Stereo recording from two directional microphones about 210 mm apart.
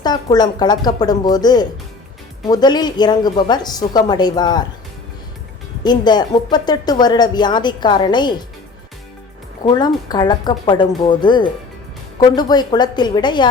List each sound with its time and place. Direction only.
0.0 s speech: 20° left (ahead or behind)
5.8 s speech: 20° left (ahead or behind)
9.6 s speech: 20° left (ahead or behind)